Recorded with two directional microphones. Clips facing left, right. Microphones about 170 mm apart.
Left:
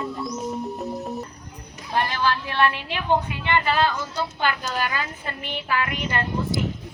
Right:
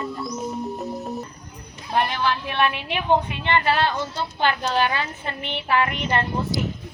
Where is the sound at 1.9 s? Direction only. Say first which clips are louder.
Right 1 dB; 15° right (ahead or behind).